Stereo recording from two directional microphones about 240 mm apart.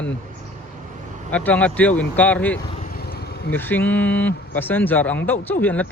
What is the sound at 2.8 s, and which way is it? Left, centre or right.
Vehicle, left.